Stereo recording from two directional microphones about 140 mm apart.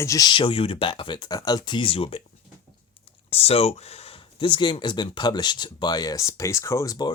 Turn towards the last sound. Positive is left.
turn(degrees=25)  # may be behind; listen again after turning